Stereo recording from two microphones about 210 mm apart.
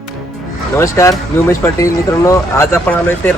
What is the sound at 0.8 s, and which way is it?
Speech, 15° left (ahead or behind).